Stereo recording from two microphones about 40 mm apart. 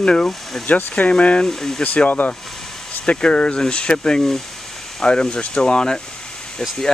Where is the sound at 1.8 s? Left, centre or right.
Left.